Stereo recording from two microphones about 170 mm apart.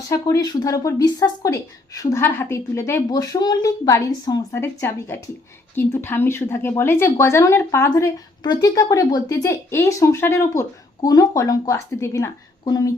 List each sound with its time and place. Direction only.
0.1 s a woman's voice: 20° left (ahead or behind)